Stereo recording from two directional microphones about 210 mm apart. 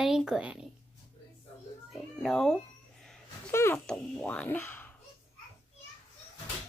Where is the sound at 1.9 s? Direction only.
Centre (ahead or behind).